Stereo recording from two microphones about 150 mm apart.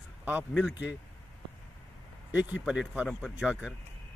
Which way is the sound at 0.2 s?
10° right (ahead or behind).